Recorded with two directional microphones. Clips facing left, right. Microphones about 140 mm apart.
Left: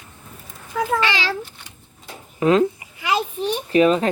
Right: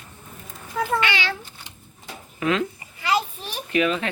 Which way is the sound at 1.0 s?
35° left (ahead or behind).